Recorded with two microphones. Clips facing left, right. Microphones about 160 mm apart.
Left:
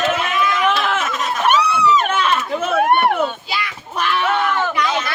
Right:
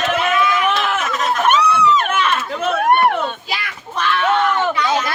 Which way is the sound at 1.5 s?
Centre (ahead or behind).